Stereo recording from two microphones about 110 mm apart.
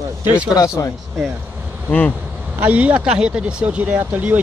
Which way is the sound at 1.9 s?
15° left (ahead or behind).